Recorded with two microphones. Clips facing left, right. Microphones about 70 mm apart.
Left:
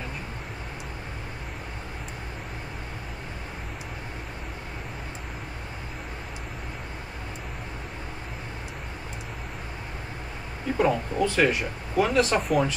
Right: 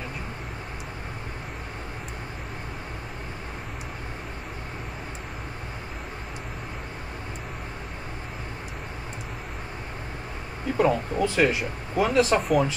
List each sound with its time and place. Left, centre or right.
10.8 s speech: right
11.4 s speech: right
12.3 s speech: centre